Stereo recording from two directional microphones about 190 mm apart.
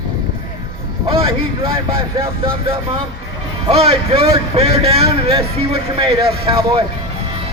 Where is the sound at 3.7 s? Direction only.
30° right (ahead or behind).